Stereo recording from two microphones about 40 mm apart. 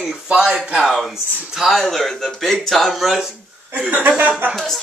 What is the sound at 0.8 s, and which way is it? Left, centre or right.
Speech, centre.